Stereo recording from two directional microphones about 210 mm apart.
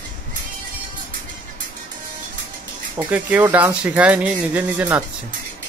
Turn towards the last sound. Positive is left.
turn(degrees=-5)  # may be behind; listen again after turning